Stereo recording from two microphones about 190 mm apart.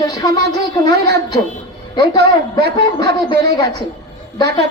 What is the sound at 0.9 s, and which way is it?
Speech, 60° right (ahead or behind).